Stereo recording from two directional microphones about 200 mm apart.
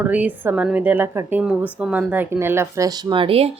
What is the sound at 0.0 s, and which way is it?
A woman's voice, 5° right (ahead or behind).